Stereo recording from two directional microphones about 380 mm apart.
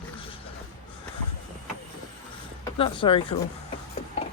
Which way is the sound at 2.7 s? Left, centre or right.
Centre.